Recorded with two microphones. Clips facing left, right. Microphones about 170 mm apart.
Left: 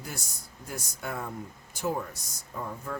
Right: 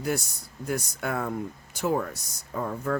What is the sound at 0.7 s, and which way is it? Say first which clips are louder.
Speech: right 7 dB; 70° right (ahead or behind).